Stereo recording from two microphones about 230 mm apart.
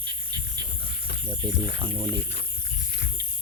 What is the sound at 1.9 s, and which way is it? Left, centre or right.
Speech, right.